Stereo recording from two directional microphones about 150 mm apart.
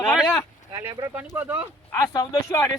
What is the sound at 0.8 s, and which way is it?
Speech, 15° right (ahead or behind).